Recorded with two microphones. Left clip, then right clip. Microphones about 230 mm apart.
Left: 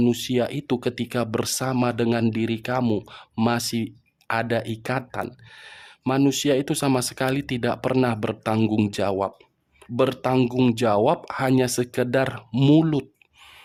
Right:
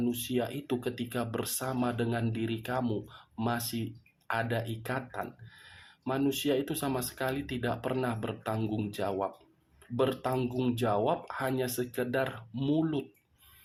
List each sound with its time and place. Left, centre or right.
0.0 s speech: left